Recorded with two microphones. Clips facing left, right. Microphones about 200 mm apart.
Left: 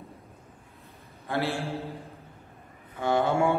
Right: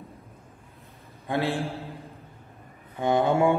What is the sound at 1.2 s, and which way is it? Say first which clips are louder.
Speech: right 2 dB; 15° right (ahead or behind).